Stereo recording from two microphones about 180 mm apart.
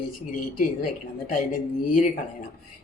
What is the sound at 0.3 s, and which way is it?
Speech, 50° left (ahead or behind).